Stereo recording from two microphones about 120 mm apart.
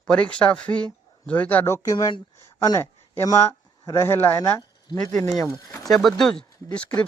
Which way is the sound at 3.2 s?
30° left (ahead or behind).